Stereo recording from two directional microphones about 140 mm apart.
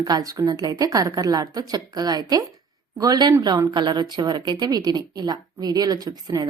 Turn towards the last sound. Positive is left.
turn(degrees=-25)  # may be behind; listen again after turning